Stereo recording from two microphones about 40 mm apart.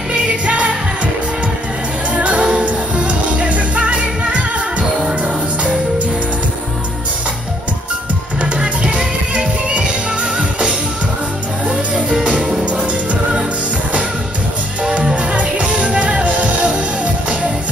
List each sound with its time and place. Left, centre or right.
0.1 s music: right
2.0 s music: right
8.4 s music: right
12.6 s music: right
14.8 s music: right